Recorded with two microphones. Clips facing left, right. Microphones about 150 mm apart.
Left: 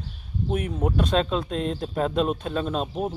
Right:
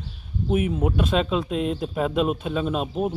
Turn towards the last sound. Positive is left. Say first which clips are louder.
# right 2 dB
turn(degrees=-5)  # may be behind; listen again after turning